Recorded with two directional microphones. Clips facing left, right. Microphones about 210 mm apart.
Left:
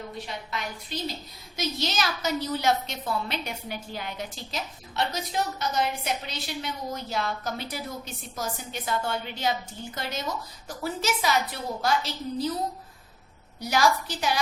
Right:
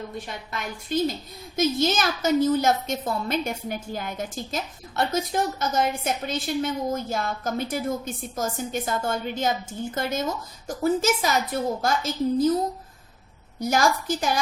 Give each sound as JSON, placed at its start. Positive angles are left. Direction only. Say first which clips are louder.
{"t": 0.3, "sound": "a woman's voice", "louder": "right 1 dB", "side_deg": -50}
{"t": 13.6, "sound": "a woman's voice", "louder": "right 2 dB", "side_deg": -45}